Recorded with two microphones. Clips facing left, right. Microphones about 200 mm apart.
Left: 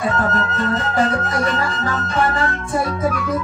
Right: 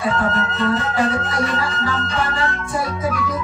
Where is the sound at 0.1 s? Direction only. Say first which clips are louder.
Left 1 dB; 45° left (ahead or behind).